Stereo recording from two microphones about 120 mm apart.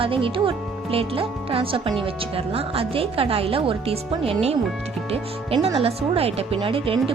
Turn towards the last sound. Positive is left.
turn(degrees=-50)  # may be behind; listen again after turning